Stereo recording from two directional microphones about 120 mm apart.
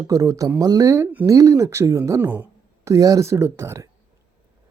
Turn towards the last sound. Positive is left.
turn(degrees=-25)  # may be behind; listen again after turning